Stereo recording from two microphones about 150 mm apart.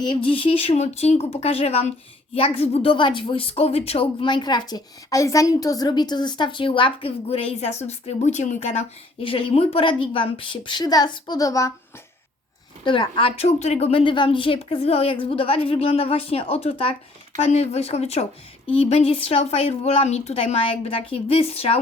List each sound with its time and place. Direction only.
0.0 s a woman's voice: 35° left (ahead or behind); by 8.8 s 50° left (ahead or behind)
9.2 s a woman's voice: 35° left (ahead or behind)
12.8 s a woman's voice: 35° left (ahead or behind)